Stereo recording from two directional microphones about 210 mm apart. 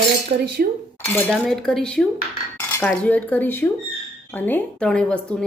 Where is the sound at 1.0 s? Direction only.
10° left (ahead or behind).